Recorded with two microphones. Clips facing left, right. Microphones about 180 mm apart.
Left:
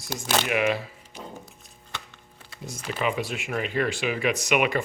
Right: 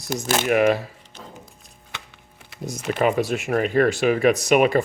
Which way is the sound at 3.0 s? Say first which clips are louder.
Right 7 dB; 40° right (ahead or behind).